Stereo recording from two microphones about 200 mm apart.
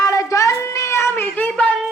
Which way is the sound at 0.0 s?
15° left (ahead or behind).